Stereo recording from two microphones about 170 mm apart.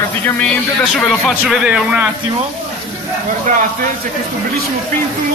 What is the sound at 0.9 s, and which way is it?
Speech, centre (ahead or behind).